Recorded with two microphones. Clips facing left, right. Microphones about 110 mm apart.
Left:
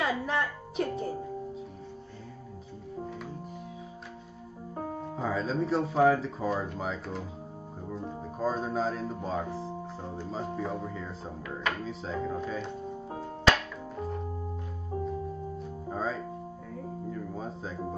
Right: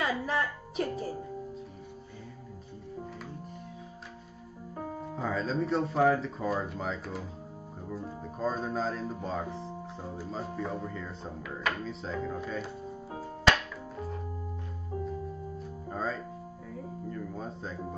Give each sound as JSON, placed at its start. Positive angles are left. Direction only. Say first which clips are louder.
{"t": 0.0, "sound": "music", "louder": "left 1 dB", "side_deg": 0}
{"t": 5.0, "sound": "speech", "louder": "left 1 dB", "side_deg": 0}
{"t": 13.9, "sound": "organ", "louder": "left 4 dB", "side_deg": 0}
{"t": 14.9, "sound": "music", "louder": "left 2 dB", "side_deg": 25}
{"t": 15.6, "sound": "music", "louder": "left 1 dB", "side_deg": 0}